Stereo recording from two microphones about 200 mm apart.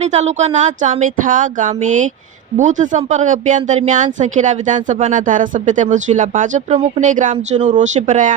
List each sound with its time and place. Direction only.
0.0 s speech: 35° right (ahead or behind)